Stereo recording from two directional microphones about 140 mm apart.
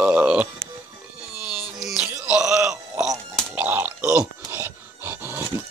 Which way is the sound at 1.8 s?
5° right (ahead or behind).